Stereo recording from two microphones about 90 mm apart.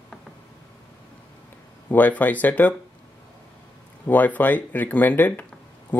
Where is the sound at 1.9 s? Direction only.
20° left (ahead or behind).